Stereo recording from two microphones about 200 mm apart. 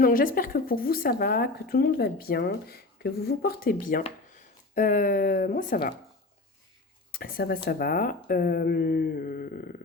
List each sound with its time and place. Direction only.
0.0 s speech: 45° left (ahead or behind)
7.1 s speech: 45° left (ahead or behind)